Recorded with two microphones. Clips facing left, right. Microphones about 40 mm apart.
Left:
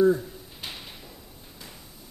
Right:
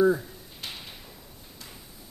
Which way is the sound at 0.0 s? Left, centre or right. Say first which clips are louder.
Left 1 dB; centre.